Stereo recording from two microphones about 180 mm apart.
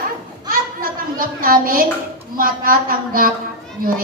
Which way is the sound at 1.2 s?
50° right (ahead or behind).